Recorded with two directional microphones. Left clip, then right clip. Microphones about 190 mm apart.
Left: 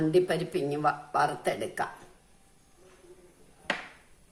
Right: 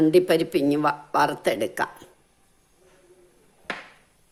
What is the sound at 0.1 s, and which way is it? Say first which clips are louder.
Speech: right 7 dB; 50° right (ahead or behind).